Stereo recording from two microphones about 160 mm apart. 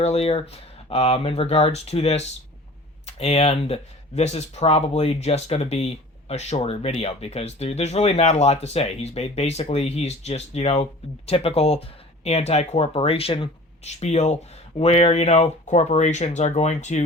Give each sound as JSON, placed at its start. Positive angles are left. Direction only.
{"t": 0.0, "sound": "speech", "side_deg": 40}